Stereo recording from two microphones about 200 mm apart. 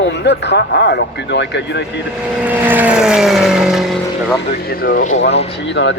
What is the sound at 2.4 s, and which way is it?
Vehicle, 10° right (ahead or behind).